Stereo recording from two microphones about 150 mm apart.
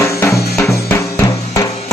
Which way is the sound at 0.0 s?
20° left (ahead or behind).